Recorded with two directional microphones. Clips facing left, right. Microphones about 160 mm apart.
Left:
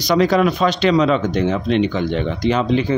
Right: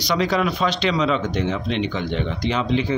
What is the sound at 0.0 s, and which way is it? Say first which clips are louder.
Speech: left 6 dB; 45° left (ahead or behind).